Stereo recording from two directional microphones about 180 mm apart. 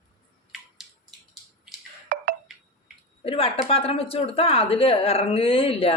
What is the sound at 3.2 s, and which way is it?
Speech, 30° left (ahead or behind).